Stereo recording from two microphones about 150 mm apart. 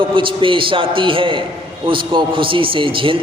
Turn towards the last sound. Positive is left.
turn(degrees=-35)  # may be behind; listen again after turning